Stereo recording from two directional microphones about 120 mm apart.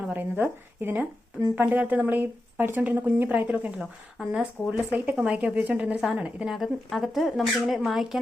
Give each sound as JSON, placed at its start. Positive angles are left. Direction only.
{"t": 0.1, "sound": "a woman's voice", "side_deg": -15}